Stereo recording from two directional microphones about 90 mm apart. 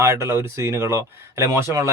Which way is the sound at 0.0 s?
30° right (ahead or behind).